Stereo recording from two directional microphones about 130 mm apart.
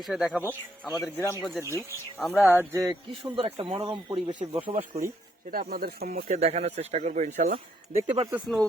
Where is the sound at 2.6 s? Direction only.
25° right (ahead or behind).